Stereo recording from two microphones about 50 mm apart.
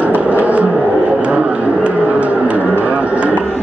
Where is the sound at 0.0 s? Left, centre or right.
Right.